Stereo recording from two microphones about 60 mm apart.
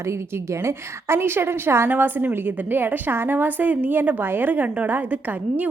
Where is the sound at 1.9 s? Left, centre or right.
Right.